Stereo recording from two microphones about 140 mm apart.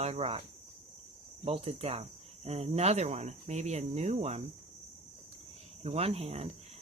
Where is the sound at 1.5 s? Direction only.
45° right (ahead or behind).